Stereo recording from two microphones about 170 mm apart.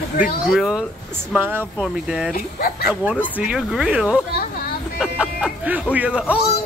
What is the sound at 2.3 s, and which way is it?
Speech, 60° left (ahead or behind).